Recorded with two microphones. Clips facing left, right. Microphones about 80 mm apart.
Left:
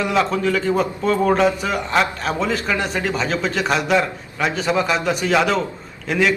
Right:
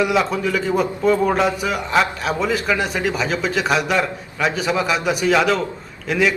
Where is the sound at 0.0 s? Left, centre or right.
Centre.